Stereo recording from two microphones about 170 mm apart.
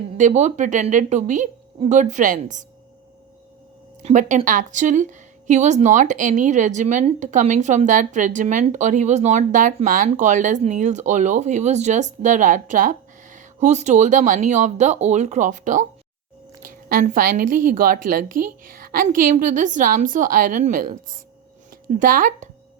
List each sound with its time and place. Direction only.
0.2 s speech: 45° right (ahead or behind)
4.0 s speech: 45° right (ahead or behind)
16.9 s speech: 50° right (ahead or behind)